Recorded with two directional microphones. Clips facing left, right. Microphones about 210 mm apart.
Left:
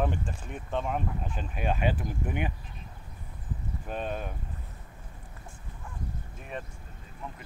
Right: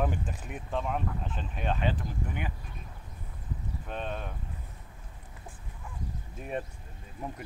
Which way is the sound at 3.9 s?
5° left (ahead or behind).